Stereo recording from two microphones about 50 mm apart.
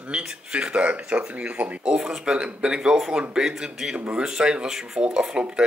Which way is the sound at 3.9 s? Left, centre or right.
Right.